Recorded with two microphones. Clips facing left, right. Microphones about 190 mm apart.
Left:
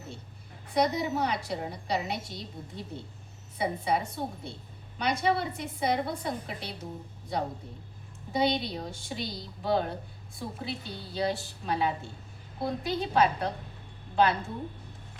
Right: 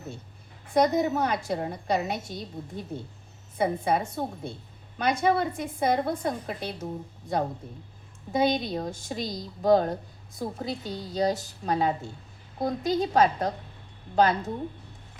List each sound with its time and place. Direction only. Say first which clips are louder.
0.7 s a woman's voice: right 4 dB; 50° right (ahead or behind)